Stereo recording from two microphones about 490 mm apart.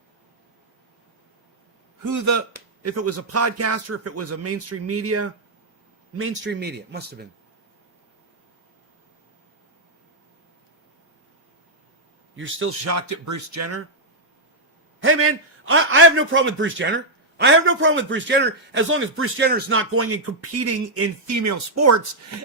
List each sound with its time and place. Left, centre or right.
2.0 s a man's voice: right; by 7.3 s centre
12.4 s speech: right
15.0 s a man's voice: right